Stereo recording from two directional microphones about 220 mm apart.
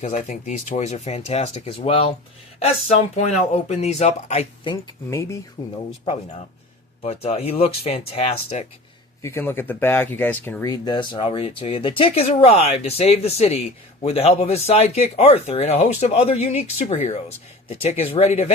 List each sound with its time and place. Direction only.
0.0 s speech: 30° left (ahead or behind); by 5.7 s 15° left (ahead or behind)
7.0 s speech: 30° left (ahead or behind)
9.2 s speech: 10° left (ahead or behind); by 18.5 s 30° left (ahead or behind)